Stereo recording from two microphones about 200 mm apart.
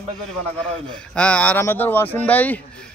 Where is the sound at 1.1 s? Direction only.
5° left (ahead or behind).